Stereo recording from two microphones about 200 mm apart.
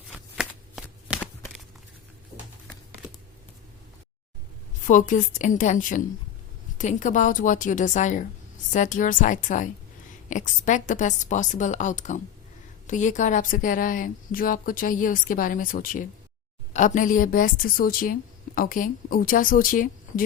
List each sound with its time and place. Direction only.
0.1 s shuffling cards: centre (ahead or behind)
4.9 s a woman's voice: 40° left (ahead or behind)